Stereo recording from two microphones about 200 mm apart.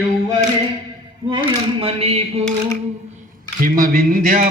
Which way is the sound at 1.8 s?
30° right (ahead or behind).